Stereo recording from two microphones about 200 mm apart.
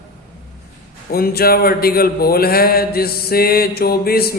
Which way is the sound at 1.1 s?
50° left (ahead or behind).